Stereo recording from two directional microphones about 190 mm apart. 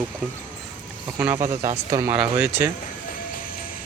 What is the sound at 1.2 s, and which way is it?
Speech, 10° right (ahead or behind).